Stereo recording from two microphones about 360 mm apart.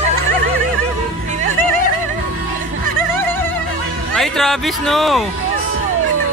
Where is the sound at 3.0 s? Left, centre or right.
Centre.